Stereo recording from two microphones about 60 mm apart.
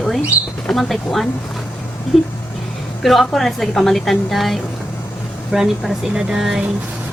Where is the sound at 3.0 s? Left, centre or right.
Centre.